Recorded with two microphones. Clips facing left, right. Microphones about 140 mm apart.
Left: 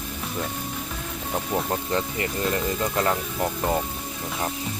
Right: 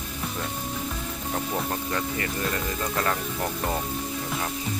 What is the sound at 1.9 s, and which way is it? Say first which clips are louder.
Speech: left 2 dB; 25° left (ahead or behind).